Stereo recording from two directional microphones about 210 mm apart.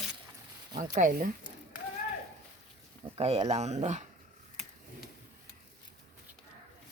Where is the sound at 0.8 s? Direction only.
40° right (ahead or behind).